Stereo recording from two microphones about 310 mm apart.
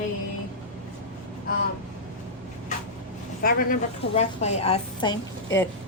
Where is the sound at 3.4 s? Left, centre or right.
Left.